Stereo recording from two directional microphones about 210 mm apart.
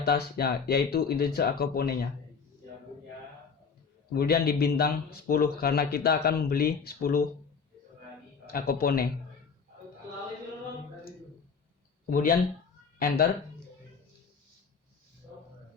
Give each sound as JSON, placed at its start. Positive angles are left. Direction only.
{"t": 0.0, "sound": "speech", "side_deg": 50}
{"t": 4.1, "sound": "speech", "side_deg": 45}
{"t": 8.4, "sound": "speech", "side_deg": 45}
{"t": 12.0, "sound": "speech", "side_deg": 40}